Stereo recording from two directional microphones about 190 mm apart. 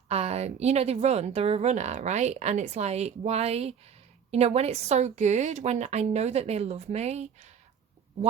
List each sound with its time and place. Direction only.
0.1 s a woman's voice: 35° right (ahead or behind)